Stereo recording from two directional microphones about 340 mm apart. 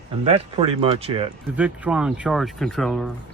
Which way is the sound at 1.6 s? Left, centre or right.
Centre.